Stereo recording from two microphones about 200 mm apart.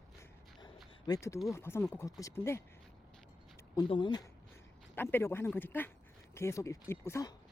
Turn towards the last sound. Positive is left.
turn(degrees=15)  # may be behind; listen again after turning